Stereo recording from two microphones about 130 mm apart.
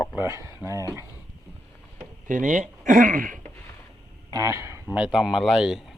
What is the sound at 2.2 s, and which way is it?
Speech, 80° right.